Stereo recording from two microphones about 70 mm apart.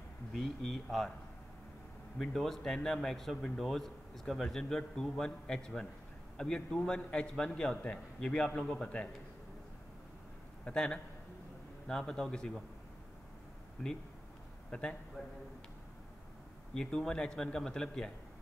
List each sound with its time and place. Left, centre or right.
0.3 s a man's voice: centre
2.1 s a man's voice: centre
10.6 s a man's voice: centre
14.7 s a man's voice: centre
16.7 s a man's voice: centre